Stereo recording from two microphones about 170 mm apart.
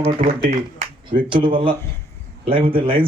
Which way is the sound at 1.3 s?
30° right (ahead or behind).